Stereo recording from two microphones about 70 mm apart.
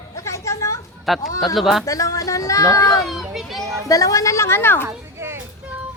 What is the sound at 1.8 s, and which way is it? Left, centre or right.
Speech, left.